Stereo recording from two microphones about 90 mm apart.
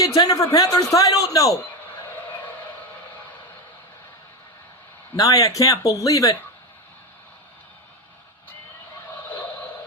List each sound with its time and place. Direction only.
0.2 s a man's voice: 40° left (ahead or behind)
5.1 s a man's voice: 40° left (ahead or behind)